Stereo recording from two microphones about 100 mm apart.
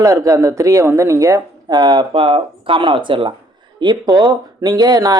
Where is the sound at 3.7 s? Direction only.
45° right (ahead or behind).